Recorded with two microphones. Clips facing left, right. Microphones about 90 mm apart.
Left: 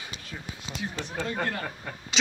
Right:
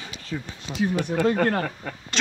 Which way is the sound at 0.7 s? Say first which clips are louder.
Right 11 dB; 55° right (ahead or behind).